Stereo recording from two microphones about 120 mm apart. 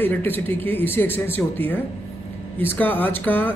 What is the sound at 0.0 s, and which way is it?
Speech, 15° left (ahead or behind).